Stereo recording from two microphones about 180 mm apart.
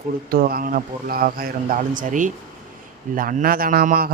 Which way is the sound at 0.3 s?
55° right (ahead or behind).